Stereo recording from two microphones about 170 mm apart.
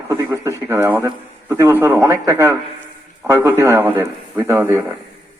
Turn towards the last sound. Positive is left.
turn(degrees=-15)  # may be behind; listen again after turning